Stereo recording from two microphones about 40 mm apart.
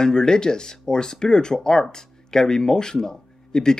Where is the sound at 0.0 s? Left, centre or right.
Centre.